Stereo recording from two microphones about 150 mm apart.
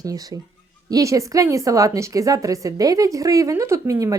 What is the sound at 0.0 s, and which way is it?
A woman's voice, 25° right (ahead or behind).